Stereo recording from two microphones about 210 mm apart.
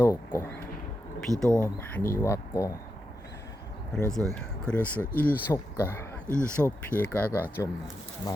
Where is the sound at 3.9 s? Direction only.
5° left (ahead or behind).